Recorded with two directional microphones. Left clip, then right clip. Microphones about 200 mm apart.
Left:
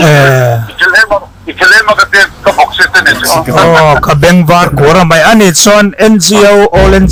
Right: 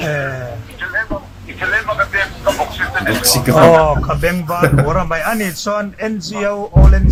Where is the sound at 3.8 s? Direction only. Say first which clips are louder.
Left 10 dB; 55° left (ahead or behind).